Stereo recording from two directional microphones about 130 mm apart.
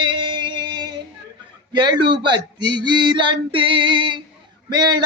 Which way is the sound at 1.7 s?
35° right (ahead or behind).